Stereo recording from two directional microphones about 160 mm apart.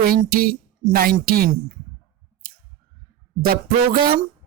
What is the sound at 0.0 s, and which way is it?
A woman's voice, 70° right (ahead or behind).